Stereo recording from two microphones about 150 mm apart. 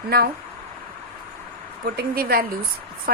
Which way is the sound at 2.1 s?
85° right.